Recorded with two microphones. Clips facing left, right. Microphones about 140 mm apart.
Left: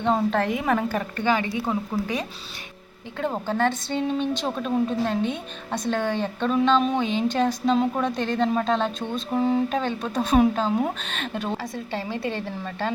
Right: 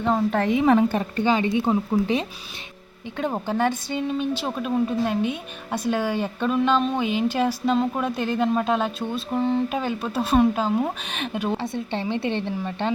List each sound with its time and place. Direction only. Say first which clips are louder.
0.7 s a woman's voice: right 5 dB; 25° right (ahead or behind); by 9.6 s 5° left (ahead or behind)
9.6 s speech: even; 5° right (ahead or behind)
11.0 s a woman's voice: right 1 dB; 15° right (ahead or behind)
11.5 s a woman's voice: right 3 dB; 25° right (ahead or behind)